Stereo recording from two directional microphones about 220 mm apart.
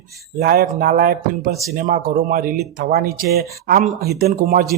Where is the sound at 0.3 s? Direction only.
40° right (ahead or behind).